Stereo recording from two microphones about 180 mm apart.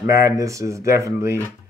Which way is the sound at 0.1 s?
15° right (ahead or behind).